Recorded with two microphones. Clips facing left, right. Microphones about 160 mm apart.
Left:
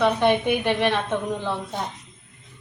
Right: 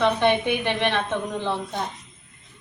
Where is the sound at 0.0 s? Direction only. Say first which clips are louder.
Left 1 dB; 5° left (ahead or behind).